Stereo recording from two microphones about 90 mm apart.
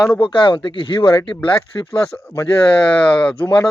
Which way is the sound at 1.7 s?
40° left (ahead or behind).